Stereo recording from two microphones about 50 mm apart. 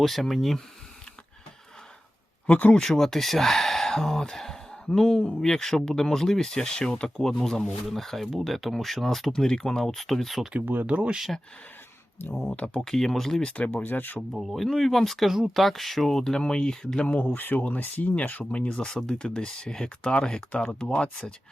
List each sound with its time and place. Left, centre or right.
0.0 s speech: centre
2.5 s speech: left
2.8 s speech: centre
10.8 s speech: right
12.5 s speech: left
12.8 s speech: centre
13.6 s speech: left
14.3 s speech: centre; by 17.3 s left
17.3 s speech: left
18.7 s speech: centre